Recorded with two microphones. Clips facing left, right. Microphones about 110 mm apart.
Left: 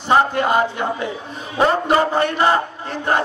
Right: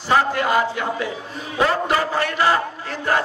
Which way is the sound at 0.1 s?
25° left (ahead or behind).